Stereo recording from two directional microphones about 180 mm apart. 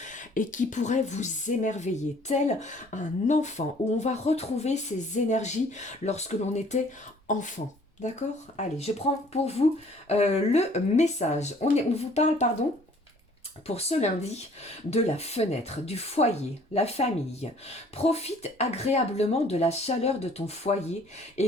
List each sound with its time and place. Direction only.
0.0 s speech: 45° left (ahead or behind)
13.7 s speech: 35° left (ahead or behind)